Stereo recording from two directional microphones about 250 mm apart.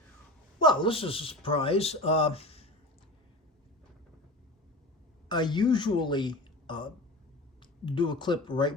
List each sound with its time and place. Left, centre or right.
0.6 s speech: centre
5.3 s speech: centre